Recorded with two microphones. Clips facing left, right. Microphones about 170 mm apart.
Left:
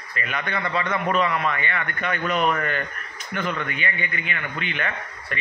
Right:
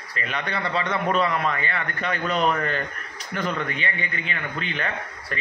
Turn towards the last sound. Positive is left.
turn(degrees=-35)  # may be behind; listen again after turning